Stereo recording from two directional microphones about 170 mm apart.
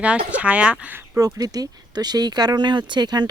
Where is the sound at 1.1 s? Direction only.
20° right (ahead or behind).